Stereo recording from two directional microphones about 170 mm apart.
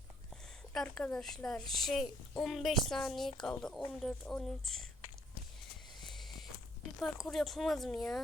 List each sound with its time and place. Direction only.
0.7 s a woman's voice: 5° left (ahead or behind)
6.0 s a sound: centre (ahead or behind)
7.0 s a woman's voice: centre (ahead or behind)